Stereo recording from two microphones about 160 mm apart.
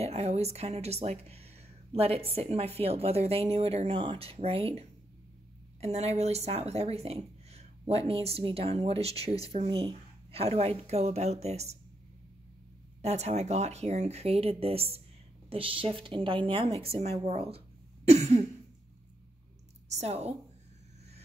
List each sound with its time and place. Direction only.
0.0 s speech: 40° right (ahead or behind)
13.0 s speech: 40° right (ahead or behind)
17.3 s a sound: 40° right (ahead or behind)
19.9 s a woman's voice: 45° right (ahead or behind)